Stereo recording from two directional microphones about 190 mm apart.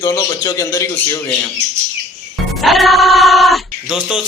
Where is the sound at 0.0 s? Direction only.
15° left (ahead or behind).